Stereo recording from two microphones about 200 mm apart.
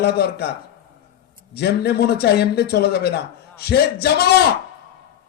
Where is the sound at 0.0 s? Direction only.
55° left (ahead or behind).